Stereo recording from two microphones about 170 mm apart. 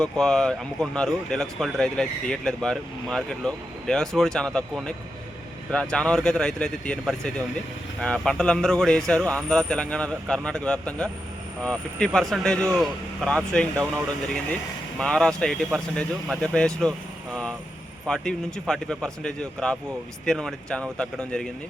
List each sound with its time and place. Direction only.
0.0 s speech: 5° left (ahead or behind)
14.9 s speech: 5° left (ahead or behind)
18.1 s speech: 5° left (ahead or behind)